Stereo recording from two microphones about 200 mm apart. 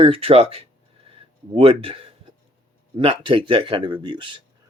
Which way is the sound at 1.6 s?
25° right (ahead or behind).